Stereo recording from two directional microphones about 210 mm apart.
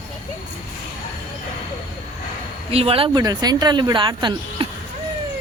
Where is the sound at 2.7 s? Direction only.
25° right (ahead or behind).